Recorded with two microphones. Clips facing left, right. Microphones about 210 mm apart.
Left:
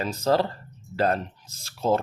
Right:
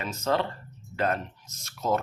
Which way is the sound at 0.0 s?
35° left (ahead or behind).